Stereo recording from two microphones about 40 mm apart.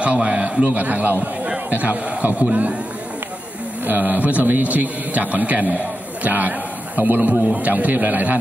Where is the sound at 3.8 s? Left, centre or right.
Right.